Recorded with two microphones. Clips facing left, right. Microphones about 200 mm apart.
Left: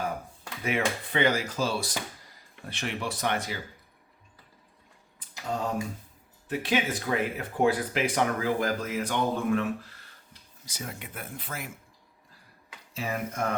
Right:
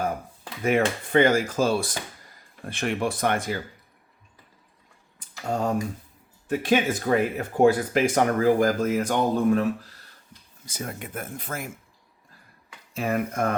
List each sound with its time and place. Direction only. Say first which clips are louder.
0.6 s speech: right 6 dB; 45° right (ahead or behind)
5.5 s speech: right 5 dB; 50° right (ahead or behind)
10.7 s speech: right 5 dB; 50° right (ahead or behind)
12.9 s speech: right 6 dB; 55° right (ahead or behind)